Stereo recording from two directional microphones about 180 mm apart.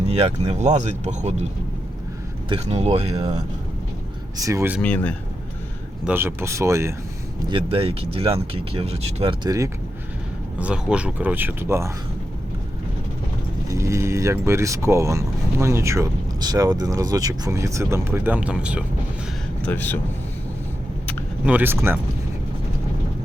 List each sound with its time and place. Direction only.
0.1 s speech: 35° right (ahead or behind)
2.5 s speech: 35° right (ahead or behind)
4.4 s speech: 15° right (ahead or behind)
4.8 s speech: 5° left (ahead or behind)
6.1 s speech: 10° right (ahead or behind)
7.4 s speech: 30° right (ahead or behind)
10.6 s speech: 5° right (ahead or behind)
13.7 s speech: 15° right (ahead or behind)
19.6 s speech: 10° left (ahead or behind)
21.4 s speech: 10° right (ahead or behind)